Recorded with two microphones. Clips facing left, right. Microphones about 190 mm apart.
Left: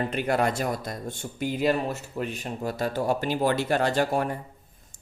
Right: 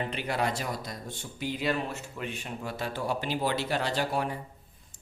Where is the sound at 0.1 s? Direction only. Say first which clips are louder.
Left 6 dB; 50° left (ahead or behind).